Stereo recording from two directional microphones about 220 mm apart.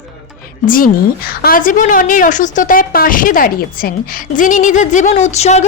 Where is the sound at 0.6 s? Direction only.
40° left (ahead or behind).